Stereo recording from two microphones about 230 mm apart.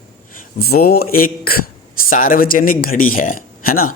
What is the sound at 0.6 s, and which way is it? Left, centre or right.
Speech, left.